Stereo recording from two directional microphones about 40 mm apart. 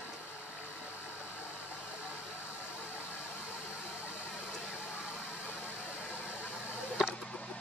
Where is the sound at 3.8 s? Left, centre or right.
Right.